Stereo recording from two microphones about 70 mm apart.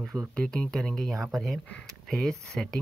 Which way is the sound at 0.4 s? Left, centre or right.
Centre.